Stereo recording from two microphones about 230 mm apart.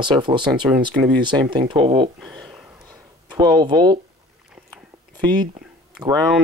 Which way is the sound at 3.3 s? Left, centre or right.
Centre.